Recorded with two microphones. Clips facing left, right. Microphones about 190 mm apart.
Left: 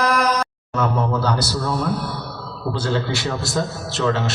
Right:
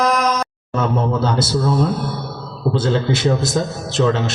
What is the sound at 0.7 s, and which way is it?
A man's voice, 25° right (ahead or behind).